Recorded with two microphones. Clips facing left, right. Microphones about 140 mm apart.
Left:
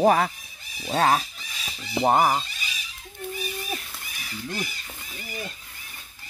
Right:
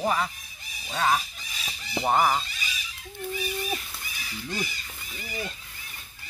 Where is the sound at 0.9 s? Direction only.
50° left (ahead or behind).